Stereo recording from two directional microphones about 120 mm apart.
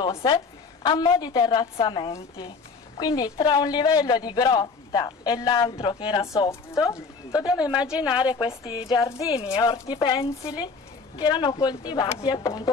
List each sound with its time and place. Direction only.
0.1 s a woman's voice: 35° left (ahead or behind)
2.1 s a man's voice: 30° left (ahead or behind)
6.5 s speech: 25° left (ahead or behind)
7.7 s a woman's voice: 10° right (ahead or behind)
8.4 s a woman's voice: 50° left (ahead or behind)
8.8 s a man's voice: 35° left (ahead or behind)